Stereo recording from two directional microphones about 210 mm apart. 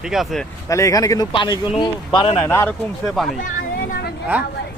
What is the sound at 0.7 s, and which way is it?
Speech, 15° left (ahead or behind).